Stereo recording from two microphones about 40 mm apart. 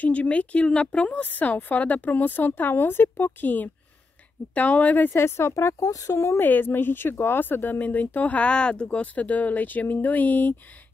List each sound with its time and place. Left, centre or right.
0.0 s speech: left
1.2 s speech: left
5.2 s speech: left
6.4 s speech: left
8.4 s speech: left